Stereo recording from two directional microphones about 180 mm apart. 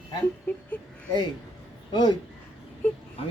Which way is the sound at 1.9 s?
25° left (ahead or behind).